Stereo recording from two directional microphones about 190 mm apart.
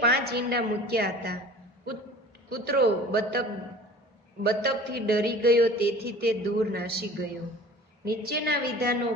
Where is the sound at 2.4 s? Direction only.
55° right (ahead or behind).